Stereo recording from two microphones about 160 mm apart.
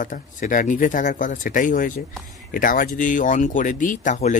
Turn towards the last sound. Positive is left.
turn(degrees=50)  # may be behind; listen again after turning